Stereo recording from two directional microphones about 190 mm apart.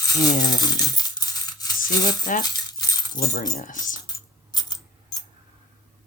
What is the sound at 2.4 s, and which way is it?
Keys jangling, 20° left (ahead or behind).